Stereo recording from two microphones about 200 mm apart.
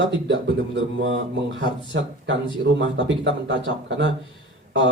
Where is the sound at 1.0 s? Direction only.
65° right (ahead or behind).